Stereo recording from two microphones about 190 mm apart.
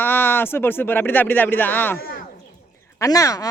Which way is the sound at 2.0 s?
50° left (ahead or behind).